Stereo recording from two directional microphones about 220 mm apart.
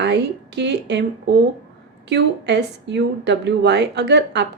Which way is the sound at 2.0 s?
50° right (ahead or behind).